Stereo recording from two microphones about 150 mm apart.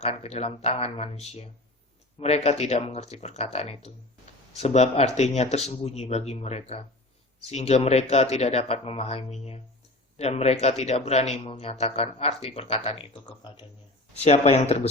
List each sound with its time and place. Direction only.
0.0 s speech: 45° left (ahead or behind)
14.2 s speech: 45° left (ahead or behind)